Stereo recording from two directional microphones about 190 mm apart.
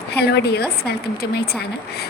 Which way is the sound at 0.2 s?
60° left (ahead or behind).